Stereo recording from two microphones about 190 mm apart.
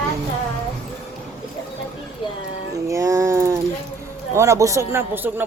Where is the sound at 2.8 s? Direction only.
15° right (ahead or behind).